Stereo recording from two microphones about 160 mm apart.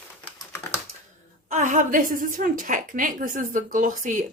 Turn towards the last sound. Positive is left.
turn(degrees=-55)  # may be behind; listen again after turning